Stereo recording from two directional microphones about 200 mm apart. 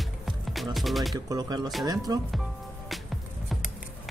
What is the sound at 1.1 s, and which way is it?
Speech, 20° right (ahead or behind).